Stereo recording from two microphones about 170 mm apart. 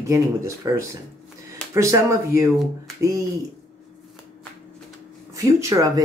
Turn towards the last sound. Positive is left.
turn(degrees=-20)  # may be behind; listen again after turning